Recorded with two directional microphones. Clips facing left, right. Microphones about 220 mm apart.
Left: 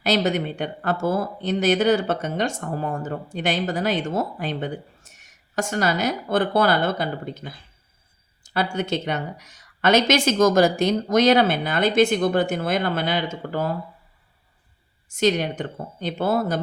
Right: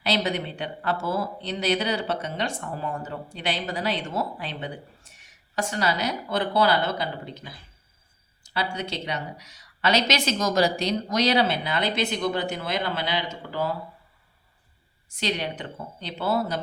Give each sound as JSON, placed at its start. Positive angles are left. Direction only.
{"t": 0.0, "sound": "speech", "side_deg": 45}
{"t": 15.1, "sound": "speech", "side_deg": 45}